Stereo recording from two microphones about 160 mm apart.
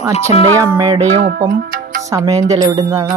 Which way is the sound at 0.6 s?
20° right (ahead or behind).